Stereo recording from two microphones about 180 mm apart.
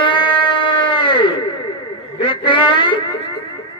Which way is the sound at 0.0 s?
25° left (ahead or behind).